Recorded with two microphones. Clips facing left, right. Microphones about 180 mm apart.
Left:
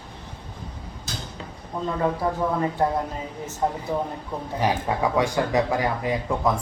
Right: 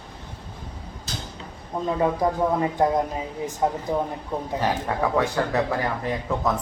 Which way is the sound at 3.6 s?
10° right (ahead or behind).